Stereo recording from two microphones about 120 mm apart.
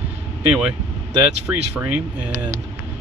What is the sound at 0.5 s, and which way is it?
Speech, 15° right (ahead or behind).